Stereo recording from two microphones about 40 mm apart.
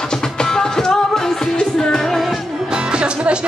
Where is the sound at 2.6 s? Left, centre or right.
Right.